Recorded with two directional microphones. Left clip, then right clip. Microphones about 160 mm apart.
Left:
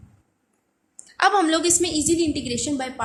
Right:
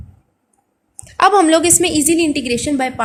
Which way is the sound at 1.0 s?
40° right (ahead or behind).